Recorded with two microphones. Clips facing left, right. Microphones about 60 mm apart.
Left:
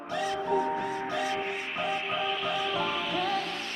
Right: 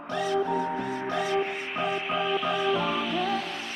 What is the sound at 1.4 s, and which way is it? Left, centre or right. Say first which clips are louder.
Music: right 3 dB; centre.